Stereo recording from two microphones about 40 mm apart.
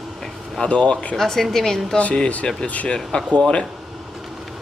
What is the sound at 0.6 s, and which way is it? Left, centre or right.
Speech, left.